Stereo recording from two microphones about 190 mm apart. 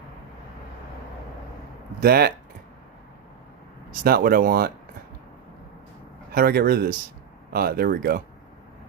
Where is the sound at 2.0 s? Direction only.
55° right (ahead or behind).